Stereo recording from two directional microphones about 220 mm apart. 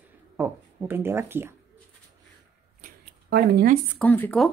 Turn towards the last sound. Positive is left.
turn(degrees=5)  # may be behind; listen again after turning